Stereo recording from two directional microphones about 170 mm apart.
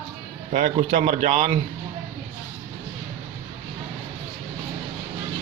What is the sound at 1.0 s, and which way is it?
Speech, 45° right (ahead or behind).